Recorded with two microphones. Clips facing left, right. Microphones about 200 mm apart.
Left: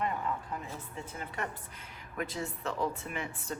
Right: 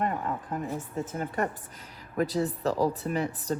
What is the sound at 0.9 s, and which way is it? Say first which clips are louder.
Speech: right 9 dB; 45° right (ahead or behind).